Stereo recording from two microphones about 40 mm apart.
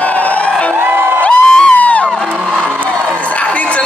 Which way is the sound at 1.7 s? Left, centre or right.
Left.